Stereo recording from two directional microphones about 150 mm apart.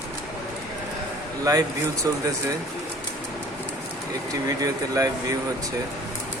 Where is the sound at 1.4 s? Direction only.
25° right (ahead or behind).